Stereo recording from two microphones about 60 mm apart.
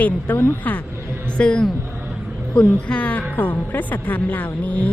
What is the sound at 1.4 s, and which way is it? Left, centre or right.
Speech, centre.